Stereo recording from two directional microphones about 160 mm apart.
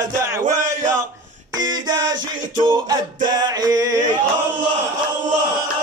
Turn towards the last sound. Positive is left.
turn(degrees=-20)  # may be behind; listen again after turning